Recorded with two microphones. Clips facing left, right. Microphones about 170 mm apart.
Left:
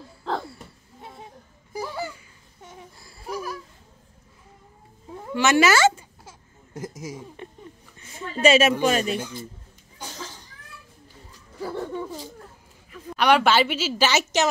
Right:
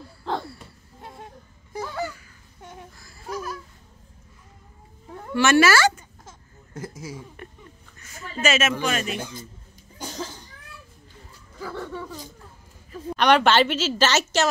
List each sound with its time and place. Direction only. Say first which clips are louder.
1.7 s a sound: right 1 dB; 10° left (ahead or behind)
5.3 s speech: right 1 dB; 15° left (ahead or behind)
6.2 s a sound: even; 15° left (ahead or behind)
7.0 s a woman's voice: left 1 dB; 15° left (ahead or behind)
8.2 s a woman's voice: left 6 dB; 30° left (ahead or behind)
11.7 s speech: left 3 dB; 20° left (ahead or behind)
13.1 s a woman's voice: right 1 dB; 5° left (ahead or behind)